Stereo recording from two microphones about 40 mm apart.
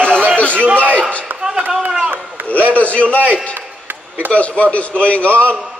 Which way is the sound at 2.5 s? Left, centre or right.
Left.